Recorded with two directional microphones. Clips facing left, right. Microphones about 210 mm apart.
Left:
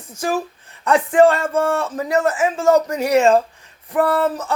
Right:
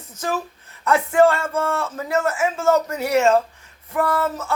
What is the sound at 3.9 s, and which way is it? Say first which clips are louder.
Speech: left 4 dB; 30° left (ahead or behind).